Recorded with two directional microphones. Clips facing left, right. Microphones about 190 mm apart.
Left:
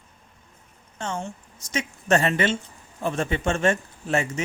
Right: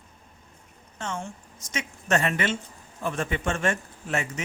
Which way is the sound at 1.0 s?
35° left (ahead or behind).